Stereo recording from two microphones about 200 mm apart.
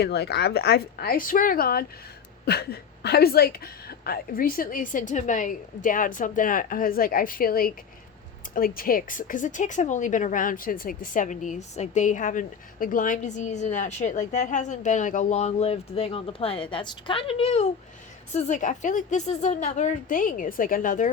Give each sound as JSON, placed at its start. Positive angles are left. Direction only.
{"t": 0.0, "sound": "a woman's voice", "side_deg": 55}